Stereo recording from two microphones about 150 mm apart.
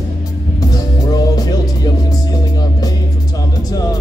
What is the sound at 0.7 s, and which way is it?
Music, 25° left (ahead or behind).